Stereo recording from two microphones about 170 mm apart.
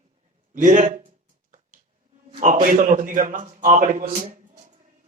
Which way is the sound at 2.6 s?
50° right (ahead or behind).